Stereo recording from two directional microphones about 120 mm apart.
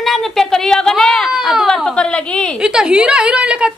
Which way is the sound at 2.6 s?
5° right (ahead or behind).